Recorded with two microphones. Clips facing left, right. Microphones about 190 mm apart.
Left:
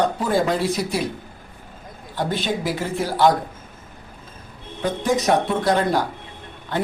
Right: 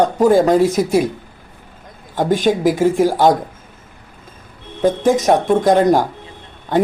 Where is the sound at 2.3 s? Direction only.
45° right (ahead or behind).